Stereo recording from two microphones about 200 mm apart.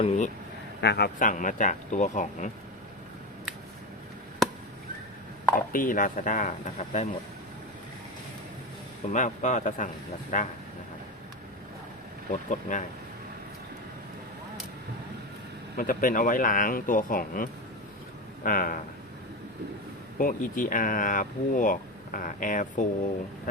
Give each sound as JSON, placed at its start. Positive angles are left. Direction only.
{"t": 0.8, "sound": "speech", "side_deg": 55}
{"t": 5.5, "sound": "speech", "side_deg": 45}
{"t": 9.1, "sound": "speech", "side_deg": 40}
{"t": 12.3, "sound": "speech", "side_deg": 40}
{"t": 15.8, "sound": "speech", "side_deg": 45}
{"t": 20.1, "sound": "speech", "side_deg": 40}